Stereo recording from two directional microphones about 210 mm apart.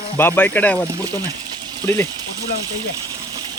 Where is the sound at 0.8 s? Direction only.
15° right (ahead or behind).